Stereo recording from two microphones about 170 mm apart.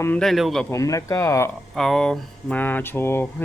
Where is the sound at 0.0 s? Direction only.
5° left (ahead or behind).